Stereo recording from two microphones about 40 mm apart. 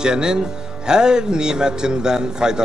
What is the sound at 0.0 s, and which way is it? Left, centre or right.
Speech, centre.